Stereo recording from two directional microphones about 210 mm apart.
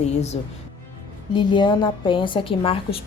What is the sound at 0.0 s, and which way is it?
A woman's voice, 30° left (ahead or behind).